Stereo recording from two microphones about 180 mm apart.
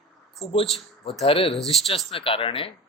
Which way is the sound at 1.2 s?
30° left (ahead or behind).